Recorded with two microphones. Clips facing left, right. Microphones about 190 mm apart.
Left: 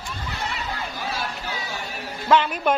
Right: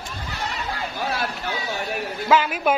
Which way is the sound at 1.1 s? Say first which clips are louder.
Right 3 dB; 60° right (ahead or behind).